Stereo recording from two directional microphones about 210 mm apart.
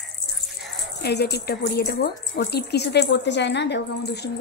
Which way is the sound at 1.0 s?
50° left (ahead or behind).